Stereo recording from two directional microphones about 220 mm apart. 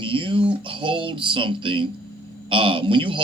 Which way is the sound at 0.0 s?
20° right (ahead or behind).